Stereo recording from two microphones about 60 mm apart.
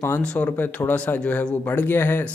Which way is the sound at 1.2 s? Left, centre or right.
Centre.